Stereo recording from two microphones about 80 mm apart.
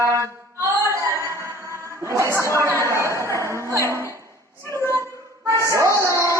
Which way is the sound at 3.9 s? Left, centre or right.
Right.